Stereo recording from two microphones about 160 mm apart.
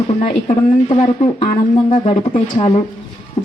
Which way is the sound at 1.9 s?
35° left (ahead or behind).